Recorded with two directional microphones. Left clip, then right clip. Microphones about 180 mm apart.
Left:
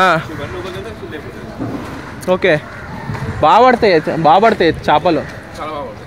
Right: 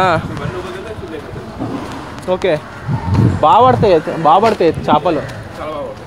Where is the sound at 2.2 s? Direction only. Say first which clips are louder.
Left 2 dB; 35° left (ahead or behind).